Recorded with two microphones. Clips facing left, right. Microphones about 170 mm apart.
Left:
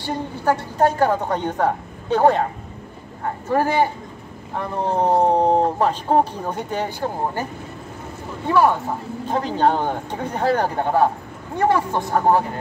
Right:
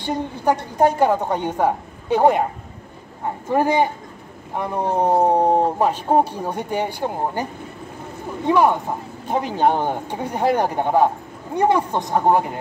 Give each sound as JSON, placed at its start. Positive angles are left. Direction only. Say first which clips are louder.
{"t": 0.0, "sound": "speech", "louder": "right 1 dB", "side_deg": -15}
{"t": 3.4, "sound": "speech", "louder": "right 1 dB", "side_deg": -15}
{"t": 8.5, "sound": "speech", "louder": "right 1 dB", "side_deg": -15}